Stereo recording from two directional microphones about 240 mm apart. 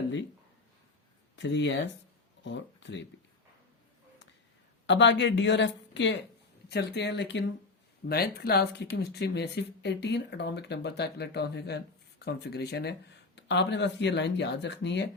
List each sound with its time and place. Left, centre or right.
1.4 s speech: left
4.9 s speech: left